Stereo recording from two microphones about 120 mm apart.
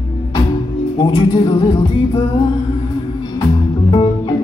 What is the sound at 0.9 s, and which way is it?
Music, 40° left (ahead or behind).